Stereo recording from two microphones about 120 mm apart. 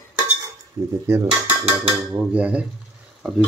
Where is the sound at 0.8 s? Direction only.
30° right (ahead or behind).